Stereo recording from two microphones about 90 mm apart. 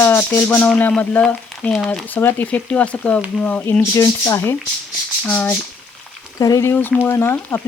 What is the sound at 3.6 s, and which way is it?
Speech, 30° left (ahead or behind).